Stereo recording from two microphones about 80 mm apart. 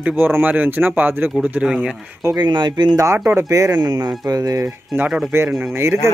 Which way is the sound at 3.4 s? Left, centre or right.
Right.